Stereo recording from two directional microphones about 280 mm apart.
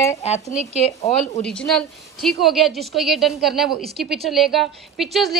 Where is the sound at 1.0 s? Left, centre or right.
Left.